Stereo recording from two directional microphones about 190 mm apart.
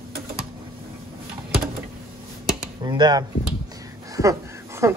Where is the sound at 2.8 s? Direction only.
20° right (ahead or behind).